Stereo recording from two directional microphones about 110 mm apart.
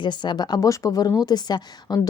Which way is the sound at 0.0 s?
45° left (ahead or behind).